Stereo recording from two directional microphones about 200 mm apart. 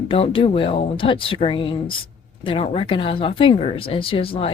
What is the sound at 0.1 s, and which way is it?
Speech, 25° left (ahead or behind).